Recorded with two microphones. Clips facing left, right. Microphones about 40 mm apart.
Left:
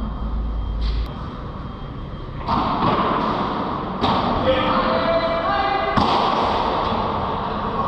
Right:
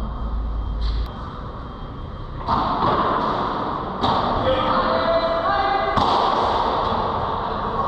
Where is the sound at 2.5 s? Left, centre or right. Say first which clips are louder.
Even; left.